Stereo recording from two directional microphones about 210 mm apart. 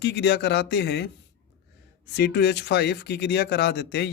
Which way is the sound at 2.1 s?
50° left (ahead or behind).